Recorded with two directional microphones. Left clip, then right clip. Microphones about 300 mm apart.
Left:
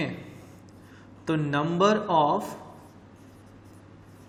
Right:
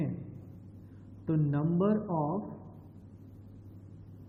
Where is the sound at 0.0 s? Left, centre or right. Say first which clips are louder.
Left 7 dB; centre.